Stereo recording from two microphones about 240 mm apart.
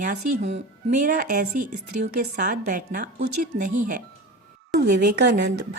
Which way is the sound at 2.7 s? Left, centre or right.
Right.